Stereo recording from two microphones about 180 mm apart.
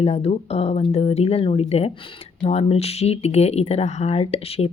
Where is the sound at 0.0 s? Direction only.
35° left (ahead or behind).